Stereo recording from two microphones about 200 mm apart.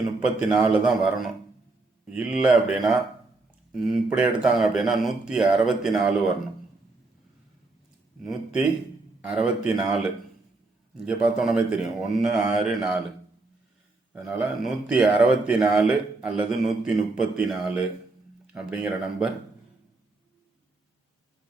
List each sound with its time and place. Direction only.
0.2 s speech: 5° right (ahead or behind)
8.2 s speech: centre (ahead or behind)
14.1 s speech: 5° right (ahead or behind)